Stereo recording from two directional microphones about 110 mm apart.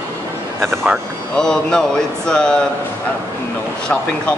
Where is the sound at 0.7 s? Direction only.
5° left (ahead or behind).